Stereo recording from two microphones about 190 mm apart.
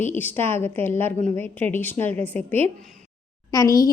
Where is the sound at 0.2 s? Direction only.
10° left (ahead or behind).